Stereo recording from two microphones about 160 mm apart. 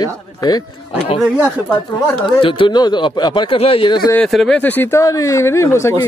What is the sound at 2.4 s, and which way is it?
Speech, 30° left (ahead or behind).